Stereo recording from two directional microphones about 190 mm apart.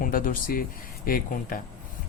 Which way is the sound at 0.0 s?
45° left (ahead or behind).